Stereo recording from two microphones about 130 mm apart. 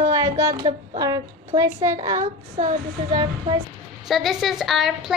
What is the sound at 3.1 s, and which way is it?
Speech, 35° right (ahead or behind).